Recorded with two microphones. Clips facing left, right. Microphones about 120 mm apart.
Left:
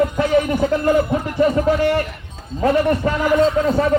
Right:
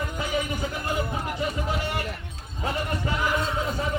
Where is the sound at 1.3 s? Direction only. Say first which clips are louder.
Left 16 dB; 60° left (ahead or behind).